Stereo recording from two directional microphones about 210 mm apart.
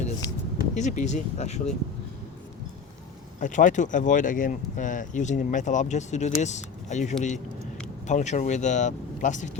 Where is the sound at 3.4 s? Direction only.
35° left (ahead or behind).